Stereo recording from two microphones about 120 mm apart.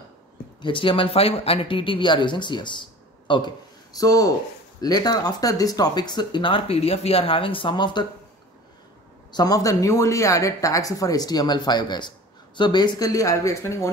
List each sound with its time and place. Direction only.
0.6 s speech: 45° left (ahead or behind)
9.3 s speech: 30° left (ahead or behind)